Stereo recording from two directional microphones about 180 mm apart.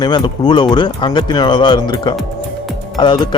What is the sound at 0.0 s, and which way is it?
A man's voice, 25° left (ahead or behind).